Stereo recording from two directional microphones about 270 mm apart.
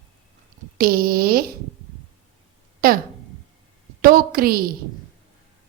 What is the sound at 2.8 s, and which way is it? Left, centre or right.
Speech, right.